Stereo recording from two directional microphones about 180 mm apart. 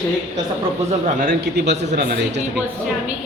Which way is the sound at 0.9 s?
45° right (ahead or behind).